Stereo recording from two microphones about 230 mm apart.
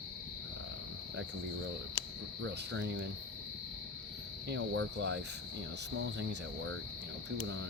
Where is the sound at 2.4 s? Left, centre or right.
Right.